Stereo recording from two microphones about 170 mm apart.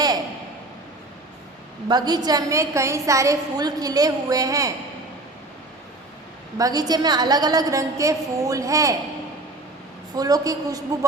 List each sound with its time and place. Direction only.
1.9 s a woman's voice: 25° right (ahead or behind)
6.6 s a woman's voice: 20° right (ahead or behind)
10.2 s a woman's voice: 20° right (ahead or behind)